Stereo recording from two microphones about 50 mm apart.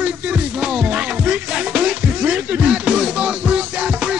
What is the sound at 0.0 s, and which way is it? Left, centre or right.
Music, right.